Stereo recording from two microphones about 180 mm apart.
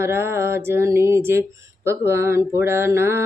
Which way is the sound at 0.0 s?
15° right (ahead or behind).